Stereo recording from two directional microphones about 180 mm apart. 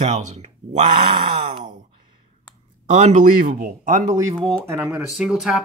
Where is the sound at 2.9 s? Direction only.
40° right (ahead or behind).